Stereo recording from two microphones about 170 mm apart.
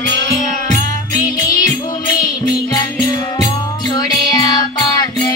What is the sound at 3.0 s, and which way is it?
Music, 20° left (ahead or behind).